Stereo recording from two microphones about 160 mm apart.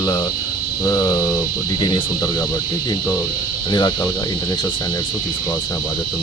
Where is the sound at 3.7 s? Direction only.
25° left (ahead or behind).